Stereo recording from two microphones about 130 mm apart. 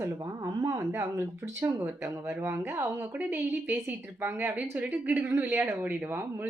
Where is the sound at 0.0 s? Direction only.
25° right (ahead or behind).